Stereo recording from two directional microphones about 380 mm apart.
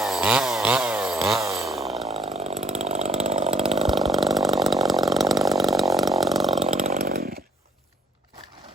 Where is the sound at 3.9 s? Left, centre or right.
Centre.